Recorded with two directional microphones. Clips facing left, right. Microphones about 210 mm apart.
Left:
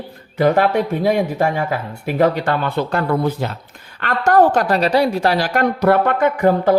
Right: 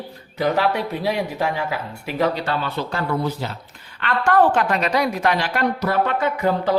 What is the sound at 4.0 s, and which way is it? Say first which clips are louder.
A woman's voice: left 3 dB; 40° left (ahead or behind).